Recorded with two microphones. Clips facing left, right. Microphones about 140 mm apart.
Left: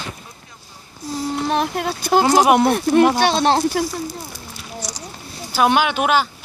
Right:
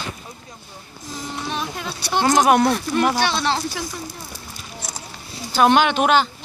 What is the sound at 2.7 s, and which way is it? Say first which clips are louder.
Speech: left 6 dB; 50° left (ahead or behind).